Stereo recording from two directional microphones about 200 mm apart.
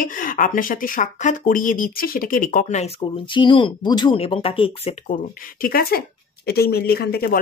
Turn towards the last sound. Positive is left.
turn(degrees=50)  # may be behind; listen again after turning